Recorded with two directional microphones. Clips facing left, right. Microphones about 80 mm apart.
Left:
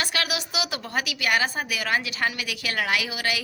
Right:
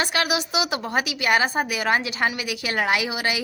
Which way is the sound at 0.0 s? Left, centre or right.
Right.